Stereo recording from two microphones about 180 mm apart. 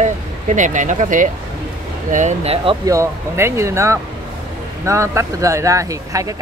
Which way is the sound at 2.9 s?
15° right (ahead or behind).